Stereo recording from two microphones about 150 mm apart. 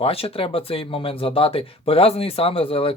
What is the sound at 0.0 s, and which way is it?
Speech, 40° left (ahead or behind).